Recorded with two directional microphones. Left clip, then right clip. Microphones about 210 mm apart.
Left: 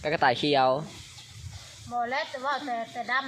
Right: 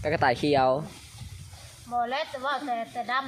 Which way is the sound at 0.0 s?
10° right (ahead or behind).